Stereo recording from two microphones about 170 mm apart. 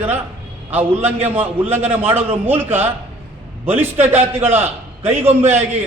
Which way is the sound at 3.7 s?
10° right (ahead or behind).